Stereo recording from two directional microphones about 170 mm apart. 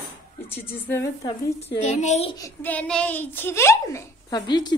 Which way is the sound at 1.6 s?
45° left (ahead or behind).